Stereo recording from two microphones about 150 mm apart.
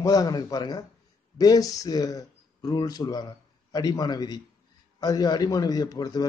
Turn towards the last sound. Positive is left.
turn(degrees=25)  # may be behind; listen again after turning